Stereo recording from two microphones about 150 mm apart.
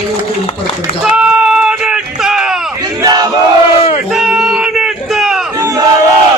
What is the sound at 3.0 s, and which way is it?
Battle cry, 25° right (ahead or behind).